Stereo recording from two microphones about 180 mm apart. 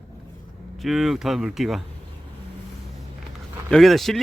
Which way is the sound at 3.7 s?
Centre (ahead or behind).